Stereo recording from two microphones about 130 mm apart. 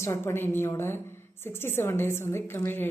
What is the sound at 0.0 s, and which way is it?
A woman's voice, 20° left (ahead or behind).